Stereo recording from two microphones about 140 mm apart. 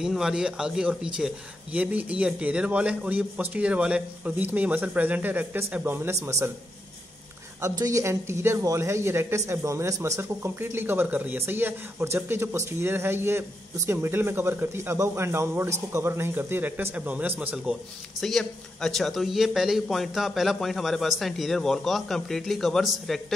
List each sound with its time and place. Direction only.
0.0 s a man's voice: 5° right (ahead or behind); by 6.5 s 20° right (ahead or behind)
7.6 s a man's voice: 25° right (ahead or behind); by 17.7 s 10° right (ahead or behind)
18.2 s a man's voice: 5° left (ahead or behind)